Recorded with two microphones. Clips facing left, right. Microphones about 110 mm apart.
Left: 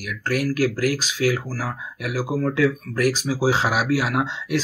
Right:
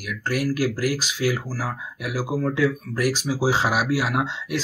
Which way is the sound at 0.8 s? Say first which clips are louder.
Left 2 dB; 55° left (ahead or behind).